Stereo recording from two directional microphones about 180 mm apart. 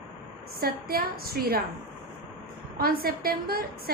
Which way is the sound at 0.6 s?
55° right (ahead or behind).